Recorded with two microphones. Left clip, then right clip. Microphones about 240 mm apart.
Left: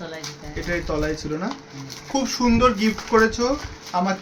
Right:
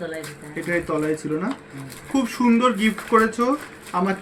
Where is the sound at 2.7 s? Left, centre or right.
Centre.